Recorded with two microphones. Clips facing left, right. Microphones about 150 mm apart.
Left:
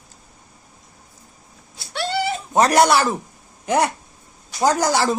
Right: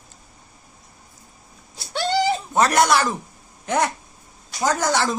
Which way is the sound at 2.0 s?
5° left (ahead or behind).